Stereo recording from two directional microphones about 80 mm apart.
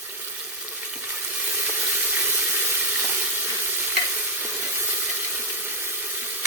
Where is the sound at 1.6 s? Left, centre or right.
Centre.